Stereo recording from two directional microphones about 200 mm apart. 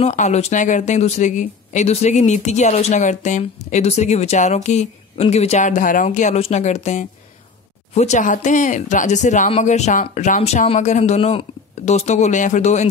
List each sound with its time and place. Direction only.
0.0 s speech: 35° left (ahead or behind)